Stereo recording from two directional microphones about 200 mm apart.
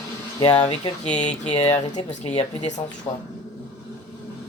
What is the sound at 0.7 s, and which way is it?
Speech, 35° left (ahead or behind).